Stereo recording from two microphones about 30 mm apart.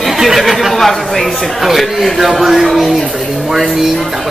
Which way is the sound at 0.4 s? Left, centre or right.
Centre.